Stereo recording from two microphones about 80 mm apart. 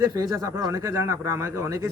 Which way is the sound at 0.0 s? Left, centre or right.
Right.